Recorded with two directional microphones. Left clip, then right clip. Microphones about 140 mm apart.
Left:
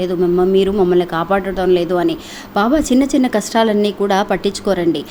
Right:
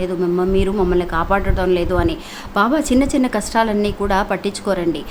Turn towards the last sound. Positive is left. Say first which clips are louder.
# left 3 dB
turn(degrees=20)  # may be behind; listen again after turning